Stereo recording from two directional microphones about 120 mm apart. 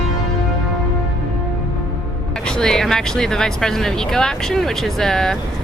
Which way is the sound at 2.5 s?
5° left (ahead or behind).